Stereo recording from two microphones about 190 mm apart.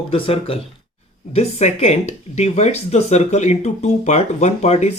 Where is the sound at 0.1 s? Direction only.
30° left (ahead or behind).